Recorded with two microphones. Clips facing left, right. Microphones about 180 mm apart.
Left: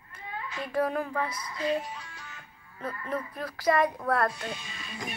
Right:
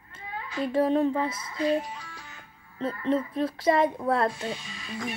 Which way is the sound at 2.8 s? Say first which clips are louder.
Right 7 dB; 25° right (ahead or behind).